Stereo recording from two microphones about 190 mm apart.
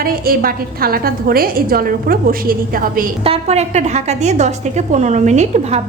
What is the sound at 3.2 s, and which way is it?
A woman's voice, 30° right (ahead or behind).